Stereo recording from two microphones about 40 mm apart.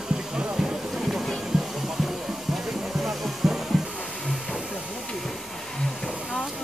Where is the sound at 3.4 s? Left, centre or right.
Centre.